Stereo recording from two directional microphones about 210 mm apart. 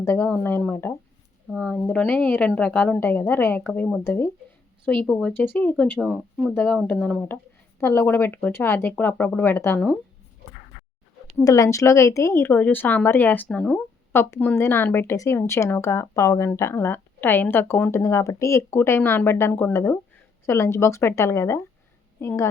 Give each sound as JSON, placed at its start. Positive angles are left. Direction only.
{"t": 0.0, "sound": "speech", "side_deg": 10}
{"t": 11.3, "sound": "speech", "side_deg": 15}